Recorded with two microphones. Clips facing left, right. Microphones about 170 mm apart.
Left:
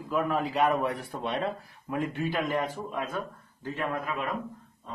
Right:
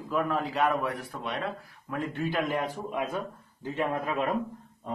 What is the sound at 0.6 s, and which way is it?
Speech, 20° left (ahead or behind).